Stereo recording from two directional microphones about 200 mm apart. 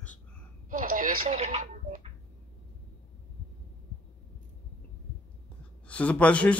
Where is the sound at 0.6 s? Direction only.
40° right (ahead or behind).